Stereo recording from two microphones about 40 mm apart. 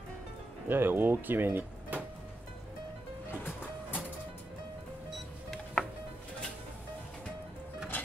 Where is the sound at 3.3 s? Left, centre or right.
Left.